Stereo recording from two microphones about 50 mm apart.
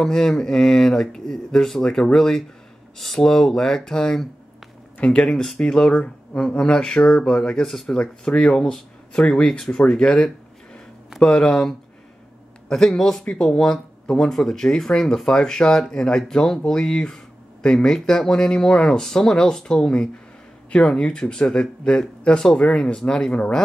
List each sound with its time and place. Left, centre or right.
0.0 s speech: centre
7.9 s speech: centre
9.8 s a sound: centre
11.1 s speech: centre